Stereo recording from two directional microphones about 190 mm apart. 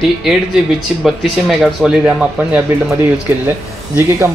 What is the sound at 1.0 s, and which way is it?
Speech, centre (ahead or behind).